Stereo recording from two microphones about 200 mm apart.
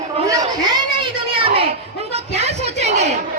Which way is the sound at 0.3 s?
20° right (ahead or behind).